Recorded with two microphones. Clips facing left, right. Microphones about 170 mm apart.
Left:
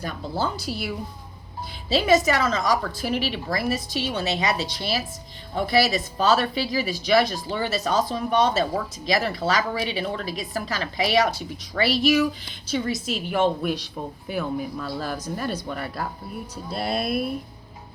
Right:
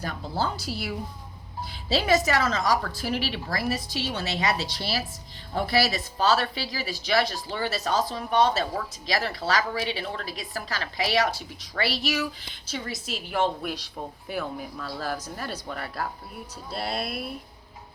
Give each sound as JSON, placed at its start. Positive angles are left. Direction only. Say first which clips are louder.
{"t": 0.3, "sound": "a woman's voice", "louder": "left 2 dB", "side_deg": 20}
{"t": 2.0, "sound": "a woman's voice", "louder": "left 4 dB", "side_deg": 20}